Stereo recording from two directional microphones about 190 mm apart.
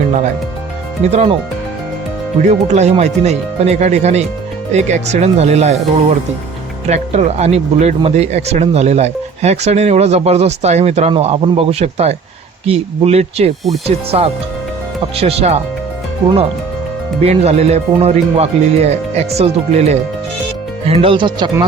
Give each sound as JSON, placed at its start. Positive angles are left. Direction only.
{"t": 1.0, "sound": "speech", "side_deg": -35}
{"t": 2.5, "sound": "speech", "side_deg": -35}
{"t": 17.2, "sound": "speech", "side_deg": -35}